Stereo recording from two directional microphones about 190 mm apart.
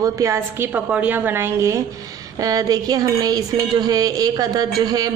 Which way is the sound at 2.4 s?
20° right (ahead or behind).